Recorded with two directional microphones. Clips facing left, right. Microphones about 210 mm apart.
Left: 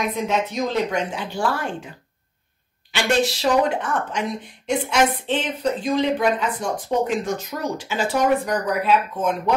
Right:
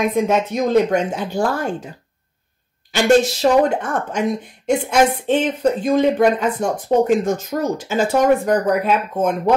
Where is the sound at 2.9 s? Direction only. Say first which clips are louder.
Right 7 dB; 45° right (ahead or behind).